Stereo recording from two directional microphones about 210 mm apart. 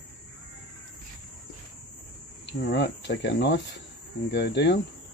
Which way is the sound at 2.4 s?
55° left (ahead or behind).